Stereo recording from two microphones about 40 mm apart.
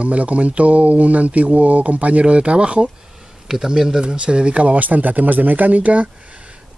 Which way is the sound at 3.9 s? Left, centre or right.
Right.